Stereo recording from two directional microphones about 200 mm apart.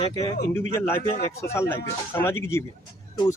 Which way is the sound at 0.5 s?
10° left (ahead or behind).